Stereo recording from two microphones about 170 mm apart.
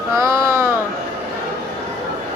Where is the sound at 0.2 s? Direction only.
15° right (ahead or behind).